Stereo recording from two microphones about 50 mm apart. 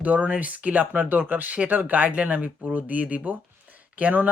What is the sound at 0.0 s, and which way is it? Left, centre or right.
Speech, right.